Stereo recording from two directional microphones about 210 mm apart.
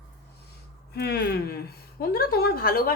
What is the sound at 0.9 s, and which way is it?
Speech, 50° left (ahead or behind).